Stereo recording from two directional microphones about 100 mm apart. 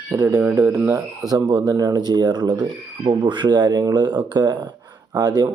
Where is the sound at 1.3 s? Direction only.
45° right (ahead or behind).